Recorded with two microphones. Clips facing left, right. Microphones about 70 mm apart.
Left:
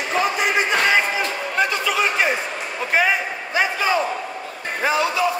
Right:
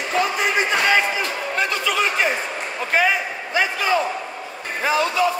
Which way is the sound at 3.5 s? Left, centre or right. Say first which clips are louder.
Even; centre.